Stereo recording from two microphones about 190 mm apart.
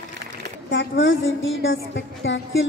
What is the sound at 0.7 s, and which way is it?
A woman's voice, 70° left (ahead or behind).